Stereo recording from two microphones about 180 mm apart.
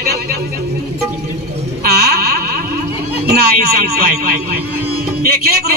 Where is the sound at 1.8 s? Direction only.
60° right (ahead or behind).